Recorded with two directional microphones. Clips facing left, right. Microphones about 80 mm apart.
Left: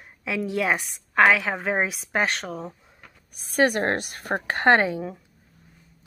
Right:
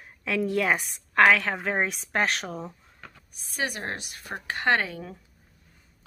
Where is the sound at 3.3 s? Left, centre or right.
Left.